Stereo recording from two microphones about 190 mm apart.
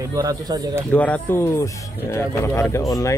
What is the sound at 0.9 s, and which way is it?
Speech, 10° left (ahead or behind).